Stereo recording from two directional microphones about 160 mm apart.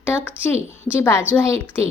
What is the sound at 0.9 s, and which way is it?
Speech, 15° left (ahead or behind).